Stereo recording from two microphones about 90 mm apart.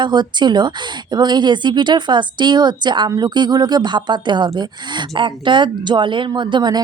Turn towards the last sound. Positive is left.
turn(degrees=-55)  # may be behind; listen again after turning